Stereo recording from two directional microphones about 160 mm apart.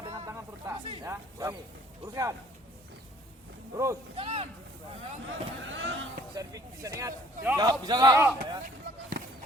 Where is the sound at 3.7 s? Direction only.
20° right (ahead or behind).